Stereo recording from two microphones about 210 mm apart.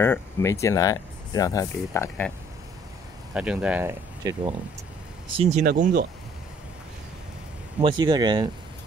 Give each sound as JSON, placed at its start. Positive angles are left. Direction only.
{"t": 0.0, "sound": "speech", "side_deg": 10}
{"t": 3.3, "sound": "speech", "side_deg": -5}
{"t": 4.2, "sound": "speech", "side_deg": -15}
{"t": 5.3, "sound": "speech", "side_deg": -30}
{"t": 5.6, "sound": "speech", "side_deg": -45}
{"t": 7.8, "sound": "speech", "side_deg": -20}